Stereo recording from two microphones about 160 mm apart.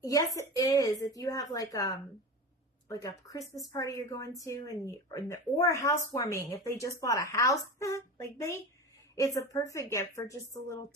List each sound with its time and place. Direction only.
0.0 s speech: 20° left (ahead or behind)